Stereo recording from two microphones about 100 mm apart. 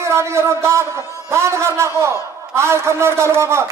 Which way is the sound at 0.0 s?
25° right (ahead or behind).